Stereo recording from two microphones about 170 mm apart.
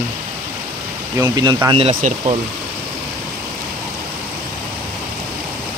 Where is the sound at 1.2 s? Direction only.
25° right (ahead or behind).